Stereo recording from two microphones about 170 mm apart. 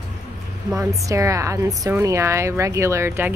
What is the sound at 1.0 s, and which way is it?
A woman's voice, 20° right (ahead or behind).